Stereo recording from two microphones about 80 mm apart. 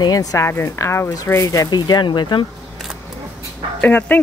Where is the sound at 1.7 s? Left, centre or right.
Left.